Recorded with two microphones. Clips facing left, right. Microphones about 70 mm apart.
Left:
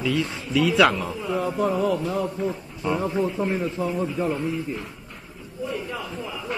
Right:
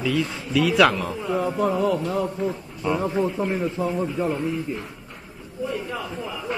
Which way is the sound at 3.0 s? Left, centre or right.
Centre.